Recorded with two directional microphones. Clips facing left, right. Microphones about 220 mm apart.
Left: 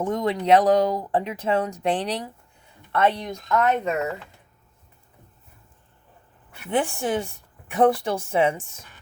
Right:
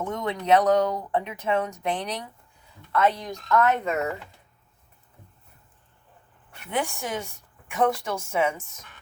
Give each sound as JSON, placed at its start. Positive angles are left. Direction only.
{"t": 0.0, "sound": "speech", "side_deg": 30}
{"t": 6.7, "sound": "speech", "side_deg": 30}